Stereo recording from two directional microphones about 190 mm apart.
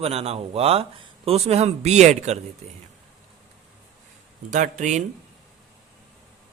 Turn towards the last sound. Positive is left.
turn(degrees=-40)  # may be behind; listen again after turning